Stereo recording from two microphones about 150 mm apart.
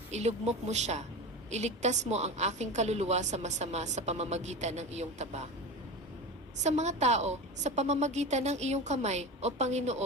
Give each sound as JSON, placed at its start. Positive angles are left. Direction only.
{"t": 0.1, "sound": "a woman's voice", "side_deg": -50}
{"t": 6.6, "sound": "a woman's voice", "side_deg": -50}